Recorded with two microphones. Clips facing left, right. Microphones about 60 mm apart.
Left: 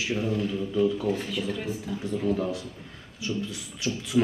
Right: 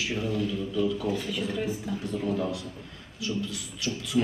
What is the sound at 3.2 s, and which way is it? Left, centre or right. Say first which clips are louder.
A man's voice: even; left.